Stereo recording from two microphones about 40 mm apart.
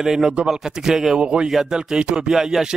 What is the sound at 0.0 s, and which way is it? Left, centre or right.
Speech, centre.